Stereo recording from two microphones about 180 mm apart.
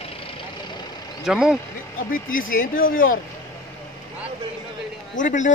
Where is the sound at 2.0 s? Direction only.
50° left (ahead or behind).